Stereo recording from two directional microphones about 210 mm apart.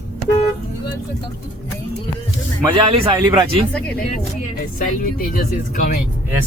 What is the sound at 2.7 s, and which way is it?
Speech, 25° right (ahead or behind).